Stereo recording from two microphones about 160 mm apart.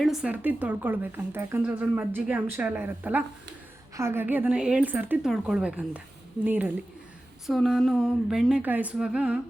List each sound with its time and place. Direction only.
0.0 s a woman's voice: 5° right (ahead or behind)
7.4 s speech: centre (ahead or behind)